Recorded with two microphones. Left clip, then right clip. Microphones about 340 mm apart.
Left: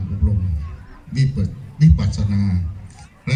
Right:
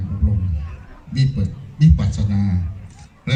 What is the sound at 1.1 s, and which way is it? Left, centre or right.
A man's voice, centre.